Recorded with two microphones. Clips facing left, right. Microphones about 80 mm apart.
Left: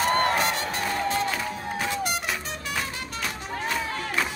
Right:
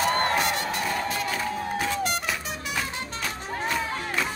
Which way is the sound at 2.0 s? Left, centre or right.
Centre.